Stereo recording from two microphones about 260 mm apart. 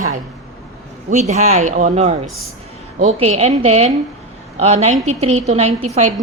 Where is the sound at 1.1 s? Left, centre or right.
Right.